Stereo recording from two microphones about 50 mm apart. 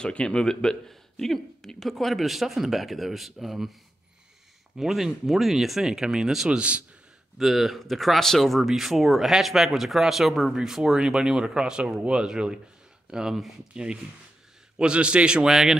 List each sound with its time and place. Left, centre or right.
0.0 s speech: centre
4.7 s speech: centre
10.6 s speech: centre
14.8 s a man's voice: right
15.5 s speech: centre